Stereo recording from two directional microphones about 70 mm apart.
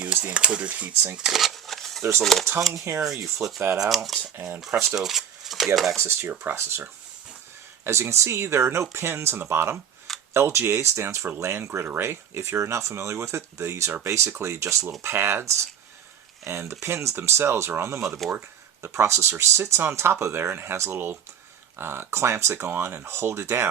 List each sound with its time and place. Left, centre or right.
0.0 s a sound: right
0.3 s speech: centre
1.1 s a sound: centre
2.2 s speech: centre
2.9 s speech: right
3.8 s speech: centre
6.0 s speech: right
7.9 s speech: right